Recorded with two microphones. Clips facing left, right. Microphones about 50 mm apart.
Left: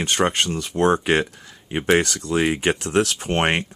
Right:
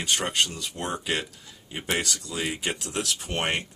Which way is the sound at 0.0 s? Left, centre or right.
Left.